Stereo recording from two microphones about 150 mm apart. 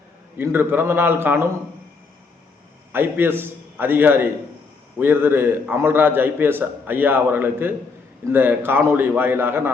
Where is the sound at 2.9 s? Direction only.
15° right (ahead or behind).